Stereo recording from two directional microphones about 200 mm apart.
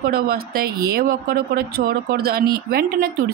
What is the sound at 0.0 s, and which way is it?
Speech, 50° right (ahead or behind).